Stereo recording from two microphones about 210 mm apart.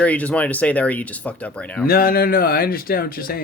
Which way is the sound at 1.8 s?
45° left (ahead or behind).